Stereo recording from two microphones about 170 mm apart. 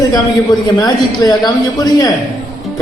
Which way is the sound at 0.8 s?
20° left (ahead or behind).